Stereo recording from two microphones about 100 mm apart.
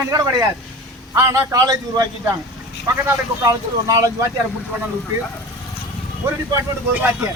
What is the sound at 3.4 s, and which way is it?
Speech, 35° right (ahead or behind).